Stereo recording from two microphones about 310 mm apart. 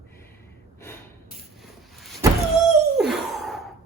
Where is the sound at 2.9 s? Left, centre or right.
Centre.